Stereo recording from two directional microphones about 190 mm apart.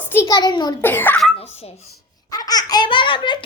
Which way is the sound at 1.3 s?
30° left (ahead or behind).